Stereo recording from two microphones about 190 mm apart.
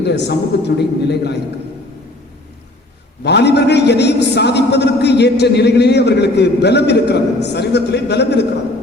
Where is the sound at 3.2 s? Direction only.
60° left (ahead or behind).